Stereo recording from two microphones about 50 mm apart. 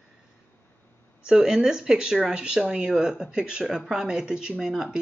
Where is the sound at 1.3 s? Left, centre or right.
Centre.